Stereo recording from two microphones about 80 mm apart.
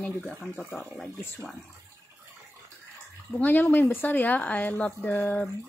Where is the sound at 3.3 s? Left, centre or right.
Left.